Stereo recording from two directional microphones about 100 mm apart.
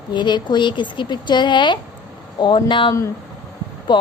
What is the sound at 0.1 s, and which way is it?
A woman's voice, 50° left (ahead or behind).